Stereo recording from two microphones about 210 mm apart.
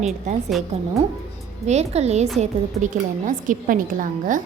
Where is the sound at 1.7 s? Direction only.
30° right (ahead or behind).